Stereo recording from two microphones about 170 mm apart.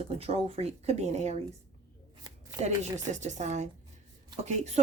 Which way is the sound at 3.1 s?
45° right (ahead or behind).